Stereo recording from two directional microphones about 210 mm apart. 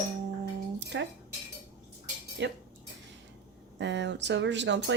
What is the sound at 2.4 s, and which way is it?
Speech, 55° right (ahead or behind).